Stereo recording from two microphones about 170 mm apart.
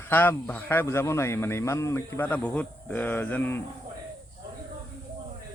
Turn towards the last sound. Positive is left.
turn(degrees=10)  # may be behind; listen again after turning